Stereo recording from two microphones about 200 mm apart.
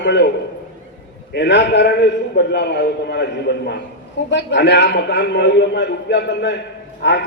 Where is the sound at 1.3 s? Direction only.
60° left (ahead or behind).